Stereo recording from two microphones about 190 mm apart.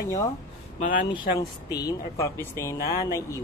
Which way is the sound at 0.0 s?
15° left (ahead or behind).